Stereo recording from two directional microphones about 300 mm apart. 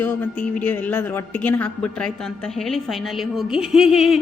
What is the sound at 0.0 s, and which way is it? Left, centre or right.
A woman's voice, centre.